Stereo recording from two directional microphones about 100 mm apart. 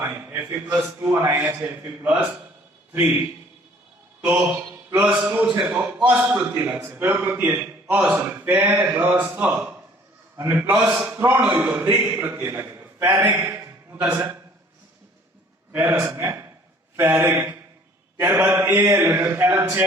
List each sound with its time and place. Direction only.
0.0 s a man's voice: 20° right (ahead or behind)
1.1 s a man's voice: 25° right (ahead or behind)
1.4 s a man's voice: 5° right (ahead or behind)
1.8 s a man's voice: 20° right (ahead or behind)
4.4 s a man's voice: 15° right (ahead or behind)
15.7 s a man's voice: 15° right (ahead or behind)